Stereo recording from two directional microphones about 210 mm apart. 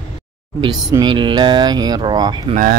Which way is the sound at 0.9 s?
20° right (ahead or behind).